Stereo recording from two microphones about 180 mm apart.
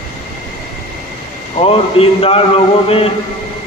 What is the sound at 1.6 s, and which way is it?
Speech, 30° left (ahead or behind).